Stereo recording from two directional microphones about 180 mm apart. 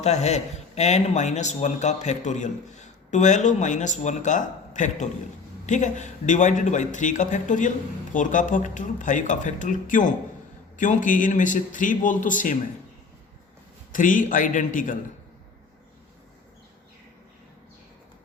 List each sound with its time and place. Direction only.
0.0 s a man's voice: 40° left (ahead or behind)
13.9 s a man's voice: 45° left (ahead or behind)